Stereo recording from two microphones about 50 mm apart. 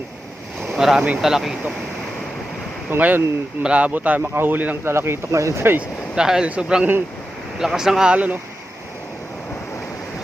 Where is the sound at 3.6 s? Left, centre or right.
Right.